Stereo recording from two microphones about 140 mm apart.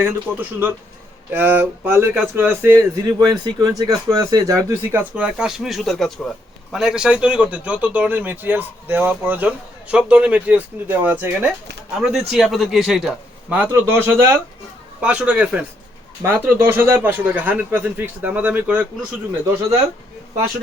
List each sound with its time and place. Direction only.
0.0 s speech: 15° right (ahead or behind)
11.9 s a man's voice: 5° right (ahead or behind)
13.5 s speech: 15° right (ahead or behind)